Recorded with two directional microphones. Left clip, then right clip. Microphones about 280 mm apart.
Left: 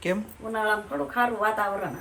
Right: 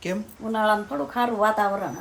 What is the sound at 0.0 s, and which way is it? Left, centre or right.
Speech, centre.